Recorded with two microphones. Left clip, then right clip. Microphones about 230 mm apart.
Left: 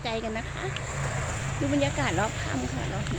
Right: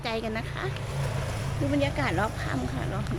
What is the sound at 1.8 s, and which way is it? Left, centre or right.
Speech, centre.